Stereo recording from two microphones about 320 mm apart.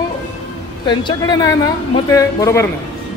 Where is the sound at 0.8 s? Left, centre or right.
Centre.